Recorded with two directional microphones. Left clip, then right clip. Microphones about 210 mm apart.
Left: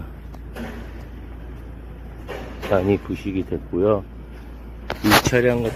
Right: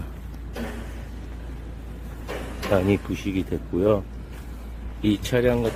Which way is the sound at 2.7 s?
15° right (ahead or behind).